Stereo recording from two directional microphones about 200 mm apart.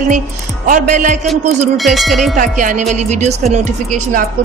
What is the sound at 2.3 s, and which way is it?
A woman's voice, 40° right (ahead or behind).